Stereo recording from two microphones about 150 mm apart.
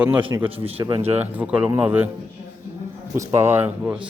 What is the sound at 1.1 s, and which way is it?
Speech, 10° right (ahead or behind).